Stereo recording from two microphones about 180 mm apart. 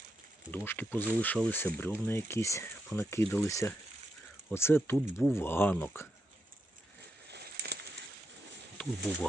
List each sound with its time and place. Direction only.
0.5 s speech: 10° left (ahead or behind)
7.3 s a sound: 70° right (ahead or behind)
9.1 s speech: 10° left (ahead or behind)